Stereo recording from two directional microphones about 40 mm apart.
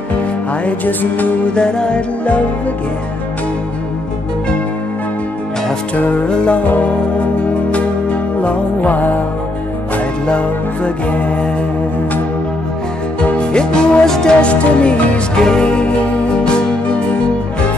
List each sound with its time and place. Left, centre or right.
0.8 s music: left
1.5 s music: left
6.3 s music: left
6.6 s music: left
10.2 s music: left
13.4 s music: left
14.4 s music: left
15.3 s music: centre